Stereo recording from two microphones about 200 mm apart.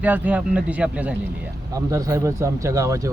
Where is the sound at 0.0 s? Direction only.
5° right (ahead or behind).